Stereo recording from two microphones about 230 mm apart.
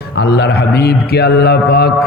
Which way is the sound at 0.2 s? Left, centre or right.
Left.